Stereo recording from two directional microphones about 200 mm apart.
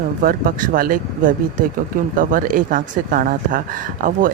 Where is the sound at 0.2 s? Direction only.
45° right (ahead or behind).